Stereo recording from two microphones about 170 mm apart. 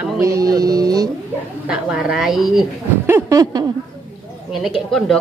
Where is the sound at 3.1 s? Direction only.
20° right (ahead or behind).